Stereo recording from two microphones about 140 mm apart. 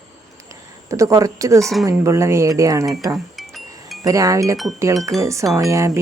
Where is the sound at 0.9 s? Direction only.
25° right (ahead or behind).